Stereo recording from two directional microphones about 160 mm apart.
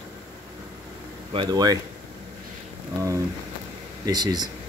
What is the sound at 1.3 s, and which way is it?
Speech, 25° right (ahead or behind).